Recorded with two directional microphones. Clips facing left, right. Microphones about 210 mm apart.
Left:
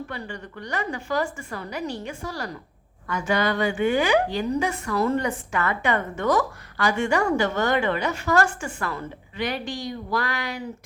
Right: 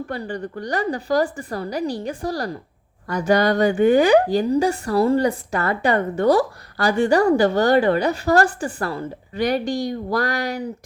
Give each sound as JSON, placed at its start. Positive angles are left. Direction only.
{"t": 0.1, "sound": "a woman's voice", "side_deg": -35}